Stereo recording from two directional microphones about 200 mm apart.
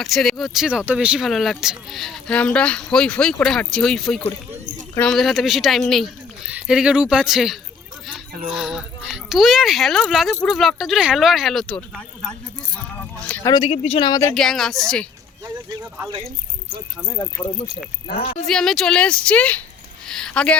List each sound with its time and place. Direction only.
0.0 s speech: centre (ahead or behind)
13.4 s speech: 20° left (ahead or behind)
14.3 s speech: centre (ahead or behind)
15.4 s speech: 15° right (ahead or behind)
17.1 s speech: 15° left (ahead or behind)
18.2 s speech: 30° left (ahead or behind)
18.4 s speech: centre (ahead or behind)
20.1 s a sound: 5° left (ahead or behind)